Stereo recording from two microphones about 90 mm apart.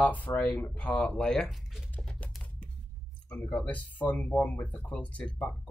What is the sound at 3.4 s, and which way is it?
Speech, 15° left (ahead or behind).